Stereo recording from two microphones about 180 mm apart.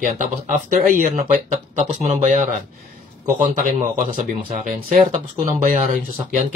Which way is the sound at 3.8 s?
45° right (ahead or behind).